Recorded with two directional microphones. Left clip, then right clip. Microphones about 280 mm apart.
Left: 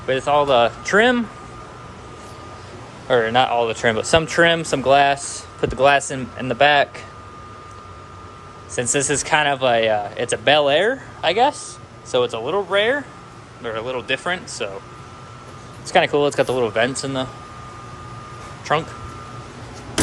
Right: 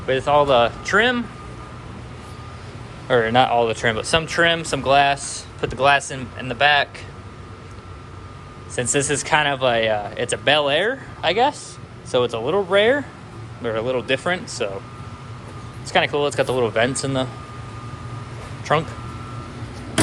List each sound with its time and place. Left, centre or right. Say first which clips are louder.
0.1 s speech: even; centre
3.1 s speech: even; centre
8.7 s speech: left 1 dB; centre
15.9 s speech: left 3 dB; centre
18.6 s a man's voice: even; centre